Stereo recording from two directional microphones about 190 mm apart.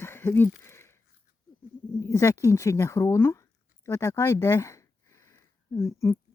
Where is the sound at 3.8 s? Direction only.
15° left (ahead or behind).